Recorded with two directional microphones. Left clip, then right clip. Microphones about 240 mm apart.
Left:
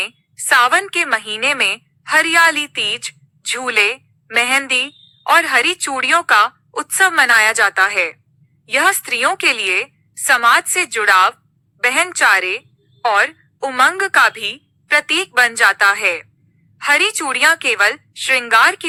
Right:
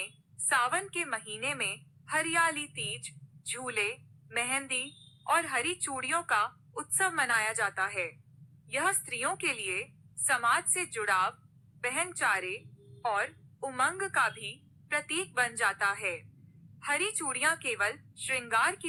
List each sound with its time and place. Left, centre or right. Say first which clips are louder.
0.0 s a woman's voice: left 16 dB; left